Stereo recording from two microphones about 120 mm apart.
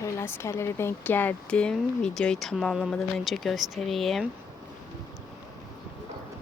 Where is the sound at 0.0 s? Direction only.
20° left (ahead or behind); by 4.3 s centre (ahead or behind).